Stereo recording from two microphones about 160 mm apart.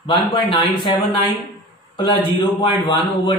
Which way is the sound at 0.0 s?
30° left (ahead or behind).